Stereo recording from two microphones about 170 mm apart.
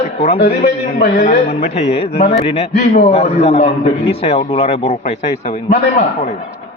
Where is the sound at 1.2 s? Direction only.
40° left (ahead or behind).